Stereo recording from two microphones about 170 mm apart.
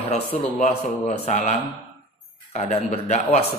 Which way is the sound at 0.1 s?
40° left (ahead or behind).